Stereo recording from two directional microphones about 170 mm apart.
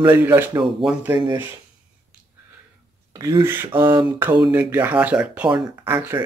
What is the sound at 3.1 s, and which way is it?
Speech, 20° right (ahead or behind).